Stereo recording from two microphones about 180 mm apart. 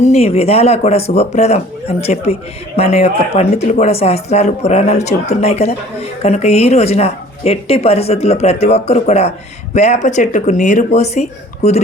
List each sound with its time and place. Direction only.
0.0 s speech: 35° left (ahead or behind)